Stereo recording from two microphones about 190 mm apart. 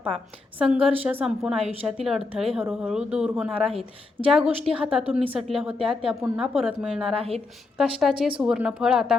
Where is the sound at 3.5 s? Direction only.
30° right (ahead or behind).